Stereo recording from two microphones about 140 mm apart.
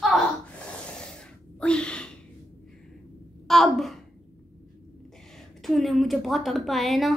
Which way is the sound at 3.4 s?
Centre (ahead or behind).